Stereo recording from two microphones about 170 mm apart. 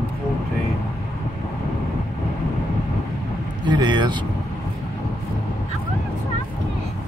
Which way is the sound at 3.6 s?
25° right (ahead or behind).